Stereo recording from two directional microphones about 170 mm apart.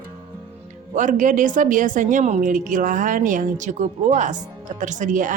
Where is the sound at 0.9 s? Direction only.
45° right (ahead or behind).